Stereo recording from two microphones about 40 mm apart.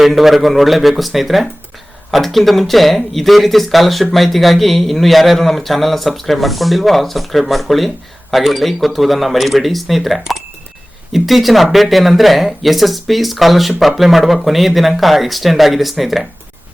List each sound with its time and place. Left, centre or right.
0.0 s speech: centre